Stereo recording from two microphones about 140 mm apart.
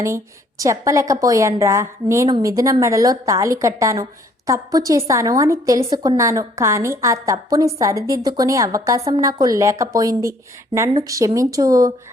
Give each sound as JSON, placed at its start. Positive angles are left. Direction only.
{"t": 0.6, "sound": "a woman's voice", "side_deg": -20}